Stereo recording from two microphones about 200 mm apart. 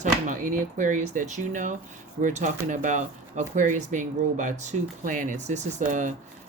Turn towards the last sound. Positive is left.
turn(degrees=-40)  # may be behind; listen again after turning